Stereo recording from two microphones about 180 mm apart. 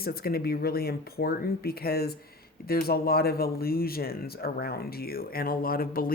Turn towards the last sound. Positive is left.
turn(degrees=55)  # may be behind; listen again after turning